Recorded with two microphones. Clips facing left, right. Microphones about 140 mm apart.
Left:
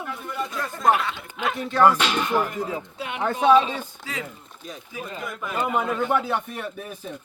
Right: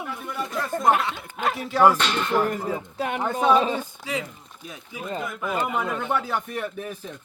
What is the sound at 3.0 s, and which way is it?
Speech, 40° right (ahead or behind).